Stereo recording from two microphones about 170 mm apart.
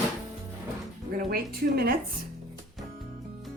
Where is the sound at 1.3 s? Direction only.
60° right (ahead or behind).